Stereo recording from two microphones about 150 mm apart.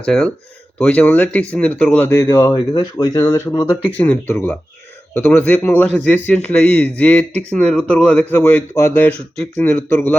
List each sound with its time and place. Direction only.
0.0 s a man's voice: 5° left (ahead or behind); by 3.8 s 25° left (ahead or behind)
3.9 s a man's voice: 15° left (ahead or behind)